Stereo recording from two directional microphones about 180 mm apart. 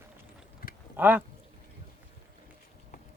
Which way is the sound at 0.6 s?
55° left (ahead or behind).